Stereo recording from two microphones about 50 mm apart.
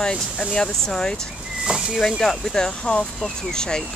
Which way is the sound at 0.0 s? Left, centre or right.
Centre.